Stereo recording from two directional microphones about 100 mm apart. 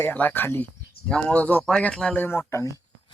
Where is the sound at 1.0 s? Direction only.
10° left (ahead or behind); by 2.8 s 30° left (ahead or behind).